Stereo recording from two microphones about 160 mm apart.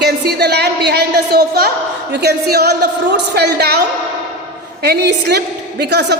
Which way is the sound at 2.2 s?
90° right.